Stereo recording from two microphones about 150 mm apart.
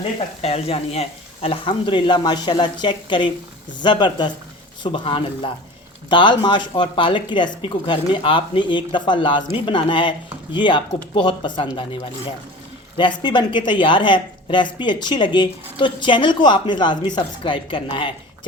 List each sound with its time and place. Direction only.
0.4 s speech: 40° left (ahead or behind)